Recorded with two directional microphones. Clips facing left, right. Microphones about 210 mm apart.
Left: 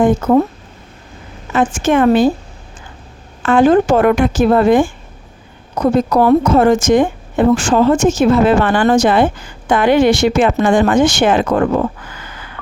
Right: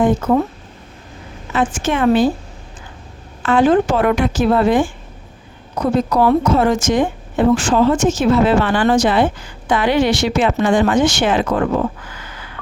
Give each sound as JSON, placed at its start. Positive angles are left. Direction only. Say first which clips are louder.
{"t": 1.5, "sound": "a woman's voice", "louder": "left 5 dB", "side_deg": 50}
{"t": 3.4, "sound": "a woman's voice", "louder": "left 3 dB", "side_deg": 50}
{"t": 6.1, "sound": "a woman's voice", "louder": "left 2 dB", "side_deg": 50}
{"t": 12.2, "sound": "a sound", "louder": "left 1 dB", "side_deg": 50}